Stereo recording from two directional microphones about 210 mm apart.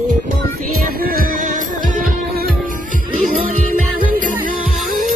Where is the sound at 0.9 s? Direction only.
45° right (ahead or behind).